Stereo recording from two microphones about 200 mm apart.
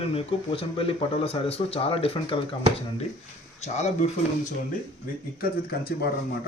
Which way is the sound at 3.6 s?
35° left (ahead or behind).